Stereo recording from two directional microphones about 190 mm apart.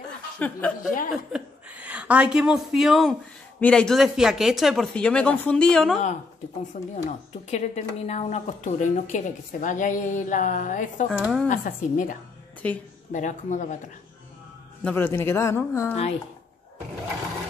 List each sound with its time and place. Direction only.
0.4 s speech: 10° left (ahead or behind)
1.1 s a woman's voice: 5° right (ahead or behind)
6.7 s speech: 40° left (ahead or behind)
11.1 s speech: centre (ahead or behind)
11.4 s speech: 40° left (ahead or behind)
12.6 s speech: 10° left (ahead or behind)
13.1 s speech: 40° left (ahead or behind)
14.8 s speech: 10° left (ahead or behind)